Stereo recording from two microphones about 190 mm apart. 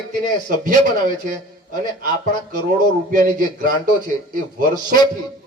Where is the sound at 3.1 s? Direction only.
45° right (ahead or behind).